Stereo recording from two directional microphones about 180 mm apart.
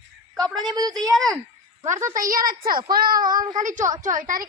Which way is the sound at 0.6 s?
20° right (ahead or behind).